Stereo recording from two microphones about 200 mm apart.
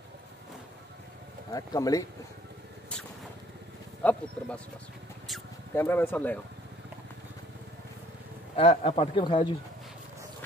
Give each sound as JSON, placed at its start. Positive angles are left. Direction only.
{"t": 1.5, "sound": "speech", "side_deg": 20}
{"t": 4.0, "sound": "speech", "side_deg": 10}
{"t": 5.8, "sound": "speech", "side_deg": 10}
{"t": 8.5, "sound": "speech", "side_deg": 30}